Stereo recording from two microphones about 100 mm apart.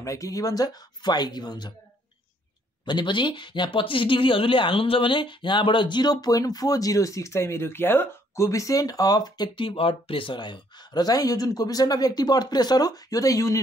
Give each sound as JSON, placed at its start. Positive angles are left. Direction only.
{"t": 0.0, "sound": "speech", "side_deg": 35}
{"t": 2.8, "sound": "speech", "side_deg": 50}
{"t": 9.7, "sound": "speech", "side_deg": 65}